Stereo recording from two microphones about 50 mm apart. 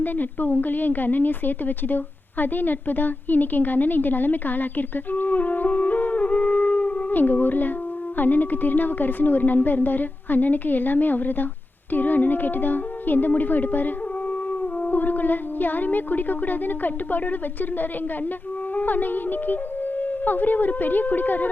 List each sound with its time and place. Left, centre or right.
0.0 s a woman's voice: left
18.8 s a woman's voice: left